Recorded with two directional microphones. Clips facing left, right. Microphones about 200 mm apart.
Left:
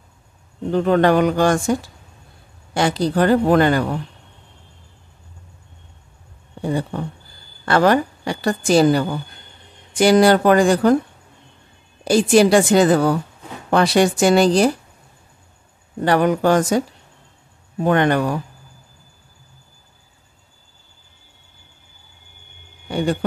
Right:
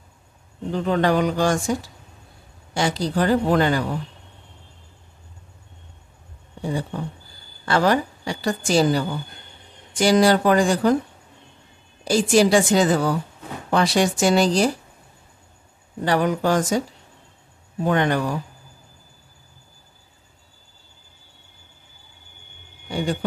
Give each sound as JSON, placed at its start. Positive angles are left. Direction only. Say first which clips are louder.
{"t": 0.7, "sound": "a woman's voice", "louder": "left 5 dB", "side_deg": 60}
{"t": 7.6, "sound": "a woman's voice", "louder": "left 4 dB", "side_deg": 60}
{"t": 12.0, "sound": "a woman's voice", "louder": "left 4 dB", "side_deg": 60}
{"t": 16.0, "sound": "a woman's voice", "louder": "left 4 dB", "side_deg": 60}
{"t": 17.8, "sound": "a woman's voice", "louder": "left 4 dB", "side_deg": 60}
{"t": 22.8, "sound": "a sound", "louder": "left 4 dB", "side_deg": 60}